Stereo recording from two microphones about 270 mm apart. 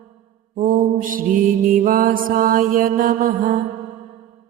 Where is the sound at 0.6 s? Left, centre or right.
Right.